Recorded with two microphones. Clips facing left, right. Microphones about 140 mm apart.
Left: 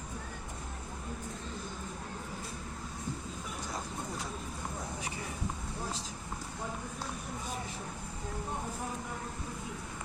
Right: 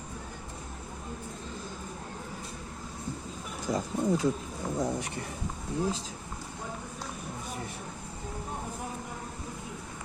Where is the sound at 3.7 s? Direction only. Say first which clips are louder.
Right 12 dB; 90° right.